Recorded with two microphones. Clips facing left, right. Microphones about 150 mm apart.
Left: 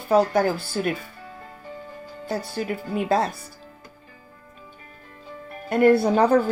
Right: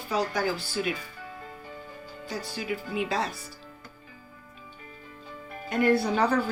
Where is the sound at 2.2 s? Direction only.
55° left (ahead or behind).